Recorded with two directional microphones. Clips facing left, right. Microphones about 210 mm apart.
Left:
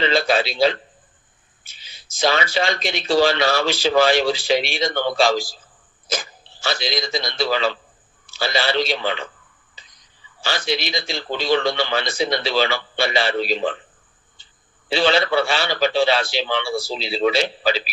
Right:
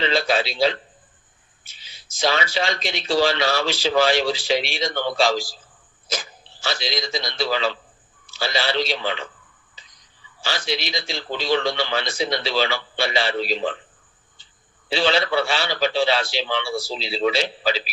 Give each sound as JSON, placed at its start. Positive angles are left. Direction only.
{"t": 0.0, "sound": "a man's voice", "side_deg": 55}
{"t": 10.4, "sound": "speech", "side_deg": 55}
{"t": 14.8, "sound": "speech", "side_deg": 55}